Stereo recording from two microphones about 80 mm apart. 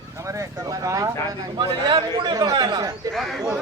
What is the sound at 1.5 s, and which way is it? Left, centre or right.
A man's voice, right.